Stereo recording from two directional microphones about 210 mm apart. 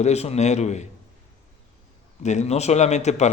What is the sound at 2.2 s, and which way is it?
Speech, 35° left (ahead or behind).